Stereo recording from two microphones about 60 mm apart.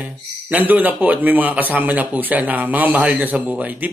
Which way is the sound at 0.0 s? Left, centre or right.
Right.